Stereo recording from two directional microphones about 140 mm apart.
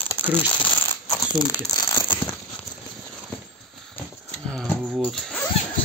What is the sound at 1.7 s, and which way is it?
Rattle, 25° left (ahead or behind).